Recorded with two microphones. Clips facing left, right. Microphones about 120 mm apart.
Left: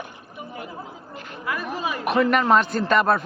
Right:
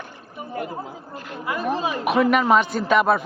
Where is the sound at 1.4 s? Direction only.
25° right (ahead or behind).